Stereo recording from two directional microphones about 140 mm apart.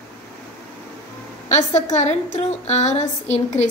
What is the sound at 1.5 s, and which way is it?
Speech, 55° left (ahead or behind).